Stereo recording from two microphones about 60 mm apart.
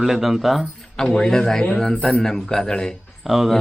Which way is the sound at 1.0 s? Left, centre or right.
Centre.